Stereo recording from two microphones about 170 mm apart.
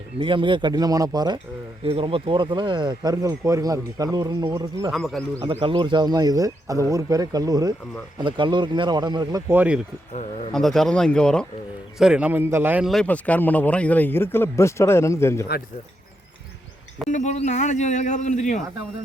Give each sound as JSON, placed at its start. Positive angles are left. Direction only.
{"t": 0.2, "sound": "speech", "side_deg": -30}
{"t": 1.8, "sound": "speech", "side_deg": -35}
{"t": 4.9, "sound": "speech", "side_deg": 0}
{"t": 5.4, "sound": "speech", "side_deg": -35}
{"t": 9.5, "sound": "speech", "side_deg": -10}
{"t": 10.5, "sound": "a man's voice", "side_deg": 0}
{"t": 17.1, "sound": "speech", "side_deg": 45}